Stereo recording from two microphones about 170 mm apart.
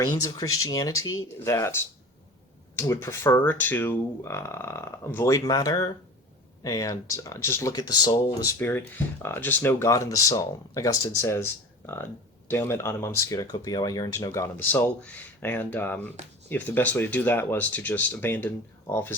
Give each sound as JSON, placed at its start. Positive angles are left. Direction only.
{"t": 0.0, "sound": "speech", "side_deg": 20}